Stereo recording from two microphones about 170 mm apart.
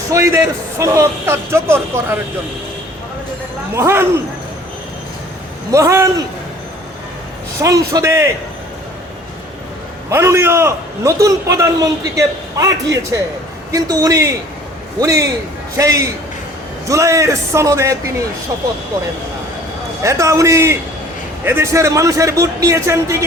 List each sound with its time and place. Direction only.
0.1 s a man's voice: 15° right (ahead or behind)
3.8 s a man's voice: 15° right (ahead or behind)
5.7 s a man's voice: 15° right (ahead or behind)
7.6 s a man's voice: 20° right (ahead or behind)
10.1 s a man's voice: 15° right (ahead or behind)
20.0 s a man's voice: 15° right (ahead or behind)